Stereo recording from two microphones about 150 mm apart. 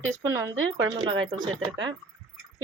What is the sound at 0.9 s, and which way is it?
Speech, 35° right (ahead or behind).